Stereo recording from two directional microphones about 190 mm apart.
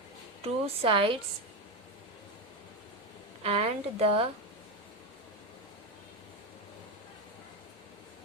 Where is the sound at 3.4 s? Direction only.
35° right (ahead or behind).